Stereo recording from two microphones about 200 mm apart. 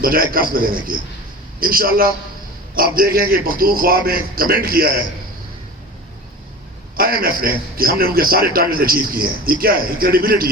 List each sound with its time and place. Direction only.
0.0 s a man's voice: 45° right (ahead or behind)
6.9 s a man's voice: 45° right (ahead or behind)